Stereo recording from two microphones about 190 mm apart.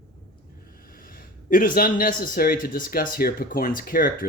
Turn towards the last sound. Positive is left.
turn(degrees=50)  # may be behind; listen again after turning